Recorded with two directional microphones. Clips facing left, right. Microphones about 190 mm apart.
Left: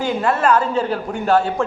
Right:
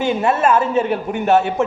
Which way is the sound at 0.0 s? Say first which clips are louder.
Right 2 dB; 25° right (ahead or behind).